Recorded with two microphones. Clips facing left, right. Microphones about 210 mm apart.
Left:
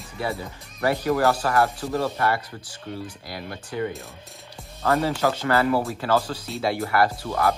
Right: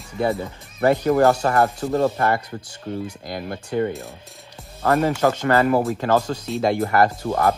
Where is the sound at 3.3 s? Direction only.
45° right (ahead or behind).